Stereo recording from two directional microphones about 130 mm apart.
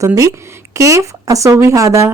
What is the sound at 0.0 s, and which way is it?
A woman's voice, 25° right (ahead or behind).